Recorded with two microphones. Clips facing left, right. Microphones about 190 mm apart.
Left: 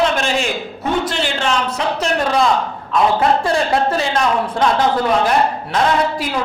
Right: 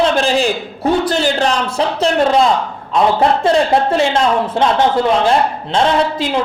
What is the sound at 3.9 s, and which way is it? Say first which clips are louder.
A woman's voice: right 4 dB; 25° right (ahead or behind).